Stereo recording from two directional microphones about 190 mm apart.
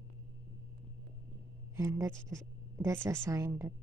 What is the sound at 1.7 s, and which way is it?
A woman's voice, 15° right (ahead or behind).